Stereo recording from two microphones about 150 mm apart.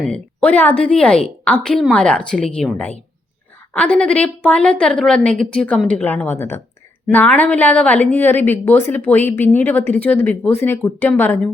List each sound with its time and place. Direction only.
0.1 s speech: 10° left (ahead or behind)
3.8 s speech: 10° left (ahead or behind)